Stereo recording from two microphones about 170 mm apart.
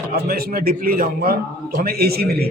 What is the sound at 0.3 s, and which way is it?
A man's voice, 60° right (ahead or behind).